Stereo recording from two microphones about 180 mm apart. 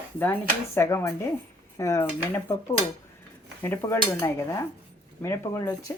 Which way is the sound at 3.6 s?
15° left (ahead or behind).